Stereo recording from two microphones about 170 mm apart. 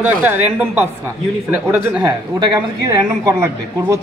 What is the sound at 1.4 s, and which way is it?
Speech, 10° right (ahead or behind).